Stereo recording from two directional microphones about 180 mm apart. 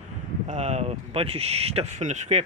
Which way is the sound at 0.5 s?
40° right (ahead or behind).